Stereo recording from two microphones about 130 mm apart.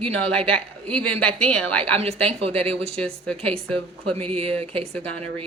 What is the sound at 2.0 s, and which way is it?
Speech, 50° right (ahead or behind).